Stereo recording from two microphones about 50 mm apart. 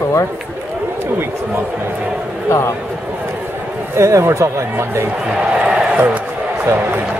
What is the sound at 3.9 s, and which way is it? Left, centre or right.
Speech, right.